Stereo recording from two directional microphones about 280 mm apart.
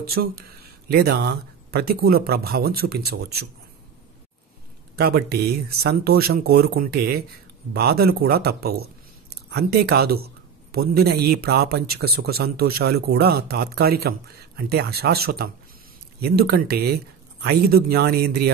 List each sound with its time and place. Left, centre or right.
0.2 s a man's voice: right
4.9 s a man's voice: right